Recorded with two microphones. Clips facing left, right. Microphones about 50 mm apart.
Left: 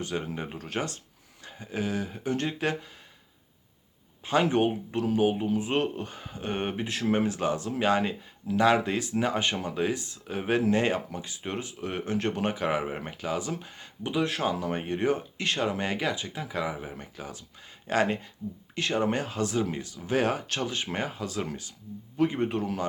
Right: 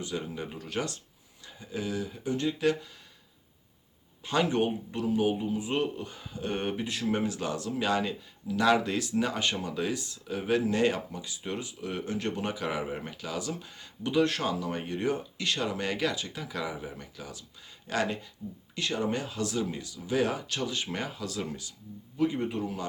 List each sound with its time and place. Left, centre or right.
0.0 s speech: left
4.3 s speech: left
14.2 s speech: centre
14.5 s speech: left